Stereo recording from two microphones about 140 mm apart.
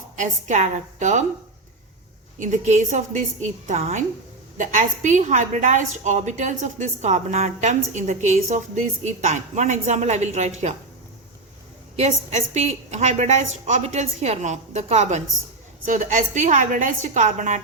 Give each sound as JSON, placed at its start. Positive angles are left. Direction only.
{"t": 0.2, "sound": "a woman's voice", "side_deg": -60}
{"t": 2.4, "sound": "a woman's voice", "side_deg": -60}
{"t": 11.9, "sound": "a woman's voice", "side_deg": -50}